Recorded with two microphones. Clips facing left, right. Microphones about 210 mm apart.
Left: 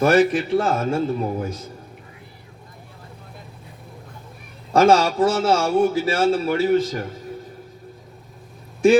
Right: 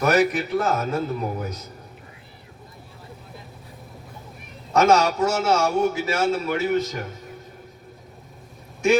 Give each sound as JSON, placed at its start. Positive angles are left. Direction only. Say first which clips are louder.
{"t": 0.0, "sound": "a man's voice", "louder": "left 3 dB", "side_deg": 30}
{"t": 4.7, "sound": "speech", "louder": "left 2 dB", "side_deg": 30}